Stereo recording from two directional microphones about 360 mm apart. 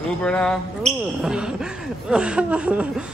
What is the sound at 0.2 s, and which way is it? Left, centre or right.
A man's voice, centre.